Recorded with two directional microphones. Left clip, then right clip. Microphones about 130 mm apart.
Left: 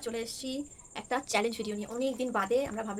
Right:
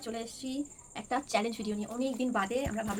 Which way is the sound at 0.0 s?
25° left (ahead or behind).